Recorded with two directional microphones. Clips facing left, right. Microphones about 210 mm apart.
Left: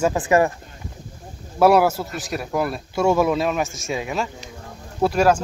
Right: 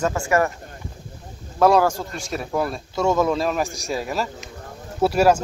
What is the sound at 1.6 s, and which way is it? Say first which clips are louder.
Speech: left 1 dB; 10° left (ahead or behind).